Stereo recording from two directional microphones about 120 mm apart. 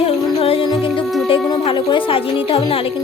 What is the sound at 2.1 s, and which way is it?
Speech, 50° left (ahead or behind).